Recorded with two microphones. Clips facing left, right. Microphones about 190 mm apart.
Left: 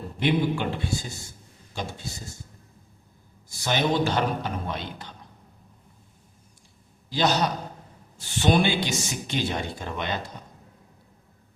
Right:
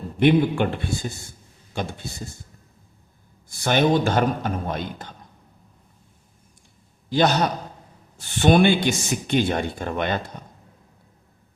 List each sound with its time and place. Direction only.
0.2 s speech: 55° right (ahead or behind)
3.5 s a man's voice: 55° right (ahead or behind)
7.1 s a man's voice: 55° right (ahead or behind)